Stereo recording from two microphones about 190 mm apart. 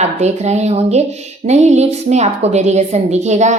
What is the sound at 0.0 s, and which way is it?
A woman's voice, 35° right (ahead or behind).